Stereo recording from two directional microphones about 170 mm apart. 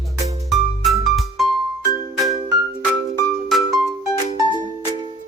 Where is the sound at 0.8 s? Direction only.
Centre (ahead or behind).